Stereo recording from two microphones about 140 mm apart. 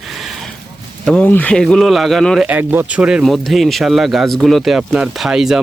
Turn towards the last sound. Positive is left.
turn(degrees=-5)  # may be behind; listen again after turning